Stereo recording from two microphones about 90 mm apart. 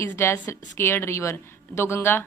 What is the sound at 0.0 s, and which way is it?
A woman's voice, 30° left (ahead or behind).